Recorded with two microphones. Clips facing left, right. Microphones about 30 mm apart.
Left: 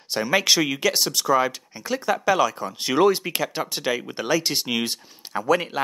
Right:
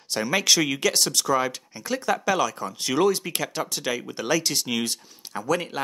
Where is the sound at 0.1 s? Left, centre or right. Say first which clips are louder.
Left 2 dB; centre.